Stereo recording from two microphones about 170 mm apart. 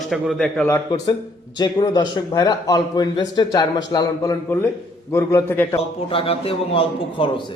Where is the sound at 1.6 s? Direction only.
25° left (ahead or behind).